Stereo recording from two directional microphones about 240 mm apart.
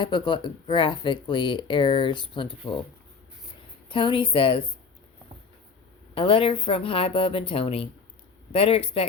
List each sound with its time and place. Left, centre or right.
0.0 s speech: centre
3.8 s speech: left
6.1 s speech: left